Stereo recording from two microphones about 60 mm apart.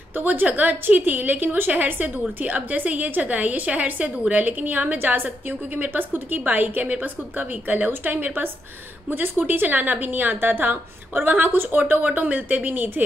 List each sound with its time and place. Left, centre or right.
0.1 s a woman's voice: right